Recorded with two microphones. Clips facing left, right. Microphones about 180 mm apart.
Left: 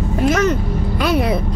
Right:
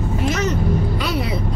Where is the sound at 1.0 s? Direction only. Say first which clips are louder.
Left 6 dB; 55° left (ahead or behind).